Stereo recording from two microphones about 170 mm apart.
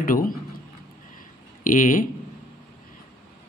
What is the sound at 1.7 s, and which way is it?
Speech, 50° left (ahead or behind).